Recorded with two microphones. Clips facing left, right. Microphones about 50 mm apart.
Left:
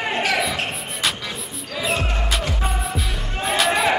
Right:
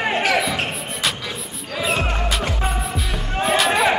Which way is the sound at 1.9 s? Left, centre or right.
Centre.